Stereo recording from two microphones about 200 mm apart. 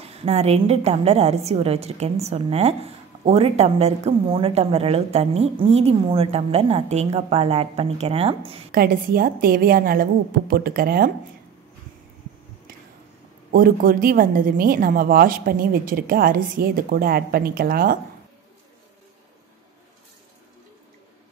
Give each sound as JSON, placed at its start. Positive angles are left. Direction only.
{"t": 0.0, "sound": "a woman's voice", "side_deg": -30}
{"t": 8.7, "sound": "a woman's voice", "side_deg": -45}
{"t": 13.5, "sound": "a woman's voice", "side_deg": -45}